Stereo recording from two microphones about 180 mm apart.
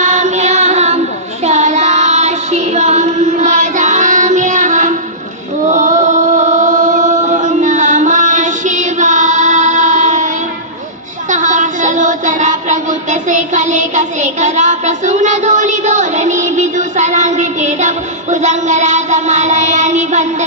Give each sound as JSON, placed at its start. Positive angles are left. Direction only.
{"t": 0.0, "sound": "child singing", "side_deg": -40}
{"t": 5.7, "sound": "chant", "side_deg": -45}
{"t": 11.3, "sound": "child singing", "side_deg": -45}